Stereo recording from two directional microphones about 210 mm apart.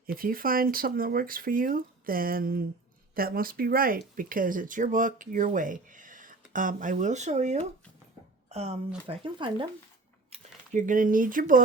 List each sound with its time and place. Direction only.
0.0 s speech: 45° right (ahead or behind); by 9.6 s 25° right (ahead or behind)
10.3 s speech: 35° right (ahead or behind)